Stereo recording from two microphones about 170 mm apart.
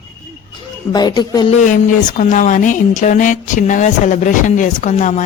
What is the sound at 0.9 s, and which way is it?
Speech, 25° left (ahead or behind).